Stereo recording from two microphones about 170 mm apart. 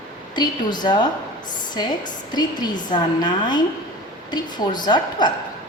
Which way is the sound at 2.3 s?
25° left (ahead or behind).